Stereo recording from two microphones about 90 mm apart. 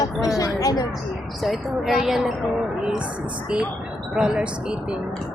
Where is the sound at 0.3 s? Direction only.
40° left (ahead or behind).